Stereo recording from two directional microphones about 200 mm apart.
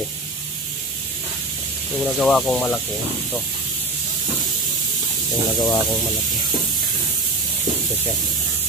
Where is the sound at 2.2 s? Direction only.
Centre (ahead or behind).